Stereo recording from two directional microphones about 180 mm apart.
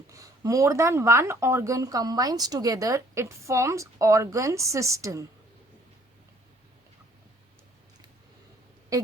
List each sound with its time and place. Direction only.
0.1 s speech: 20° right (ahead or behind)